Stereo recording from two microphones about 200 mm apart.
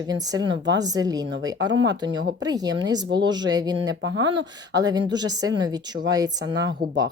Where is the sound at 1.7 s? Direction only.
65° right (ahead or behind).